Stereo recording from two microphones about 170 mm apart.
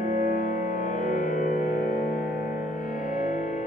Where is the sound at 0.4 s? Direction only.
50° left (ahead or behind).